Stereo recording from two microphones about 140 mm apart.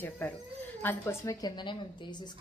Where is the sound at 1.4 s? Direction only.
30° left (ahead or behind).